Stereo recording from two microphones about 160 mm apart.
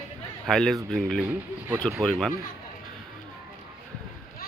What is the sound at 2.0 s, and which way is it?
Speech, 5° left (ahead or behind).